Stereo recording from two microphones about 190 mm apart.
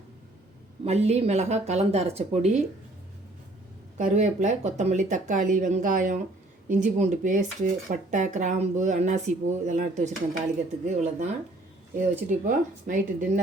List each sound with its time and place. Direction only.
0.9 s speech: 35° right (ahead or behind)
3.9 s speech: 40° right (ahead or behind)